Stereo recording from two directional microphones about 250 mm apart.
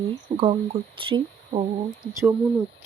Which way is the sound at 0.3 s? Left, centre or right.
Right.